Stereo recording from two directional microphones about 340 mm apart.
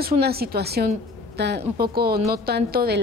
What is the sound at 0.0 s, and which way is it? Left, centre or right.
A woman's voice, right.